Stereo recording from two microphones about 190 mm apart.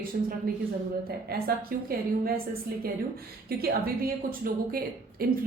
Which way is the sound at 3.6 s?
50° right (ahead or behind).